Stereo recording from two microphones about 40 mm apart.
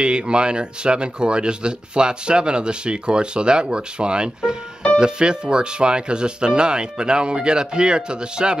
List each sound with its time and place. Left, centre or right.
0.0 s speech: right